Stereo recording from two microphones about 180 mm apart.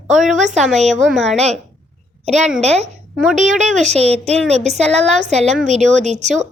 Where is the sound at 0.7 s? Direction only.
40° right (ahead or behind).